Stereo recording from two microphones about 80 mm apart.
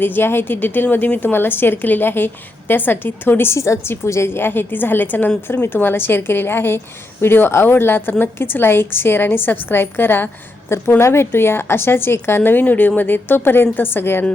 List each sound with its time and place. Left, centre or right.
0.0 s a woman's voice: left